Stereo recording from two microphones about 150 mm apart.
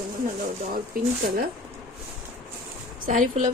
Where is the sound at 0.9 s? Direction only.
70° right (ahead or behind).